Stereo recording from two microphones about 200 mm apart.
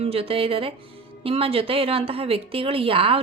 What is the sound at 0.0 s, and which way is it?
A woman's voice, 30° right (ahead or behind).